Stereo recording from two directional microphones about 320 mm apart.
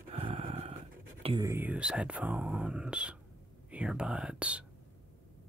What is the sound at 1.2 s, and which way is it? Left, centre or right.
Speech, centre.